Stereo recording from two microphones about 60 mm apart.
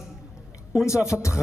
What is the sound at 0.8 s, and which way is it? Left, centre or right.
Speech, left.